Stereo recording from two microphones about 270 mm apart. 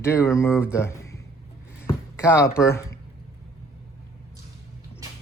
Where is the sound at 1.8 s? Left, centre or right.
Centre.